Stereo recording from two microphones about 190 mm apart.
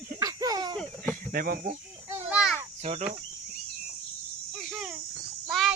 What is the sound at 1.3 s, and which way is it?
Speech, 50° right (ahead or behind).